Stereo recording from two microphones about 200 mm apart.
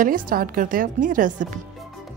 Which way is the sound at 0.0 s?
45° right (ahead or behind).